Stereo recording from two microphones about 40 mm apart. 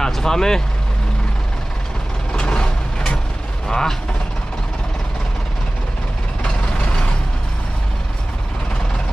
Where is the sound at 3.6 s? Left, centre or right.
Centre.